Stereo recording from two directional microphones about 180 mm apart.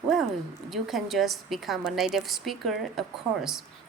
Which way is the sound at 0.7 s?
Centre (ahead or behind).